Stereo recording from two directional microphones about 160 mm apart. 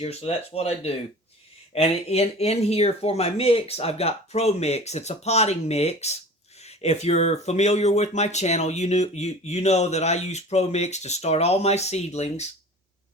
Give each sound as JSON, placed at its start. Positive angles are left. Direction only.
{"t": 0.0, "sound": "speech", "side_deg": 40}